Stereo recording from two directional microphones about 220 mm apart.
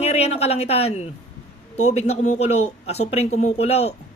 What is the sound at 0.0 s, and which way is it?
A woman's voice, 30° left (ahead or behind).